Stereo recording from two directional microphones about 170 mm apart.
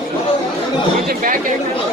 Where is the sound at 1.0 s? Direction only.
55° right (ahead or behind).